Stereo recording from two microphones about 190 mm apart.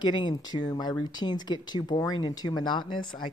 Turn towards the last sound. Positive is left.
turn(degrees=25)  # may be behind; listen again after turning